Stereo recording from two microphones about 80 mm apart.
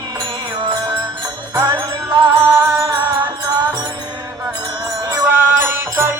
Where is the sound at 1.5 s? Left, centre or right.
Right.